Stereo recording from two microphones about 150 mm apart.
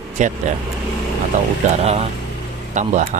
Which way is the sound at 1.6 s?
50° right (ahead or behind).